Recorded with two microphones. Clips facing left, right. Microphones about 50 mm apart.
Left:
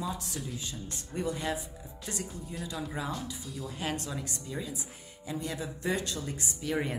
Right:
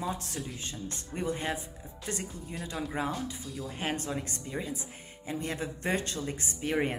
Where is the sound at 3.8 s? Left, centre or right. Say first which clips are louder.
Right 2 dB; right.